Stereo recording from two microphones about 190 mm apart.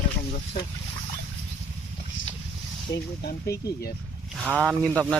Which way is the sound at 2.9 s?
65° left (ahead or behind).